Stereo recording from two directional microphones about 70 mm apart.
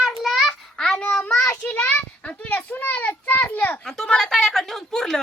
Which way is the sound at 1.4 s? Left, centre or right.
Left.